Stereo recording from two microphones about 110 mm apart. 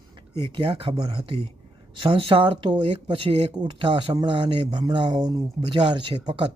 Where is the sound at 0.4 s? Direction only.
50° right (ahead or behind).